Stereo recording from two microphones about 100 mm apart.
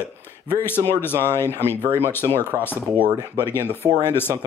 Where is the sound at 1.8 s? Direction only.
25° right (ahead or behind).